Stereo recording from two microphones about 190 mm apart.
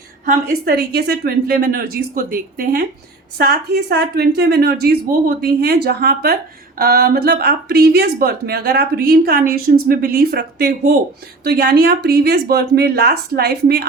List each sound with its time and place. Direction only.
0.3 s a woman's voice: 55° right (ahead or behind)